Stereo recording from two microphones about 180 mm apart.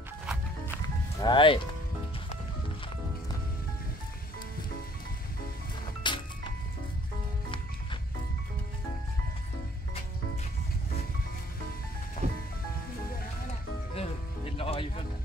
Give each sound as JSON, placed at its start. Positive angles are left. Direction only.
{"t": 1.2, "sound": "speech", "side_deg": 30}
{"t": 6.0, "sound": "music", "side_deg": 25}
{"t": 12.2, "sound": "music", "side_deg": 50}
{"t": 13.5, "sound": "music", "side_deg": 30}